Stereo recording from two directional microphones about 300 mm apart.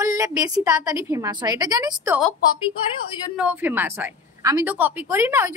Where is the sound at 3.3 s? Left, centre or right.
Centre.